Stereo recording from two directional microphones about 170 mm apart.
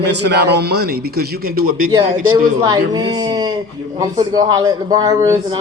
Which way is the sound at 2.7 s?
25° right (ahead or behind).